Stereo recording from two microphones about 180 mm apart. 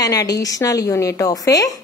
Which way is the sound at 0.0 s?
20° left (ahead or behind).